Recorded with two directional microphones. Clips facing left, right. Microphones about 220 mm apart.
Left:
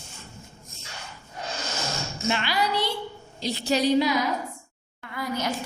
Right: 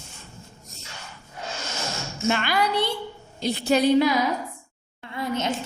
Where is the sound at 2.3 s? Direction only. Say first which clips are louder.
Right 2 dB; 50° right (ahead or behind).